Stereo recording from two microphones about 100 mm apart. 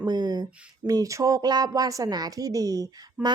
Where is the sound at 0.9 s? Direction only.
35° right (ahead or behind).